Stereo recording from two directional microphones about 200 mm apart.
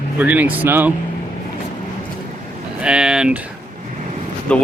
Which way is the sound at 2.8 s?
5° right (ahead or behind).